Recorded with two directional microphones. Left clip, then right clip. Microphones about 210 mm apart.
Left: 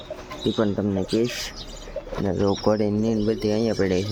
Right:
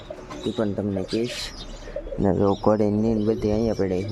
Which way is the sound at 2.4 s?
5° right (ahead or behind).